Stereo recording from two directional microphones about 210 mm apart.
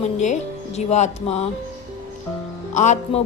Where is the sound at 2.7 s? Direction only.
35° left (ahead or behind).